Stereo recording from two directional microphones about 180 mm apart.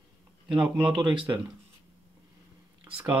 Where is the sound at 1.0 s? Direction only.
25° right (ahead or behind).